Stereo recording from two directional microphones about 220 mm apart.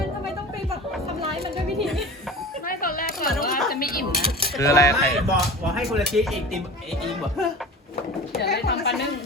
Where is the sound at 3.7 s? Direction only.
40° left (ahead or behind).